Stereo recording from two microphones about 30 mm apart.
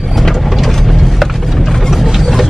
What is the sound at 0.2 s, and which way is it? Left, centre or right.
Mechanisms, centre.